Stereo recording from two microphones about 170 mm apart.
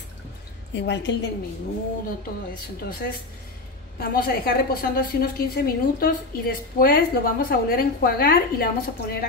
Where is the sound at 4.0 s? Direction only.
60° left (ahead or behind).